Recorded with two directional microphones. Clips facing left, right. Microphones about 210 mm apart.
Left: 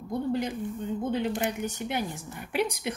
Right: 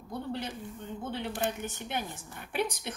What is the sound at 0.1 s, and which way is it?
Speech, 15° left (ahead or behind).